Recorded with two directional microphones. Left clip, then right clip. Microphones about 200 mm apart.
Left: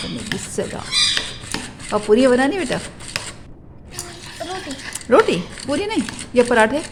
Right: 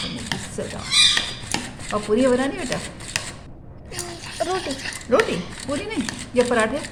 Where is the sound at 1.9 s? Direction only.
50° left (ahead or behind).